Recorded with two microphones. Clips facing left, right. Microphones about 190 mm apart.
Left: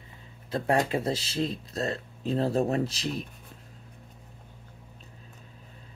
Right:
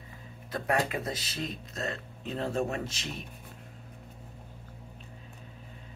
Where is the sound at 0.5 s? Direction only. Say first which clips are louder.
Left 4 dB; 30° left (ahead or behind).